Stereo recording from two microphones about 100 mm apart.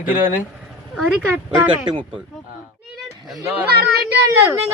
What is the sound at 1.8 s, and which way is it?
Speech, 55° right (ahead or behind).